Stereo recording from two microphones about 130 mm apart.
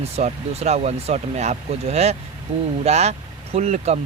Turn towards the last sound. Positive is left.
turn(degrees=-60)  # may be behind; listen again after turning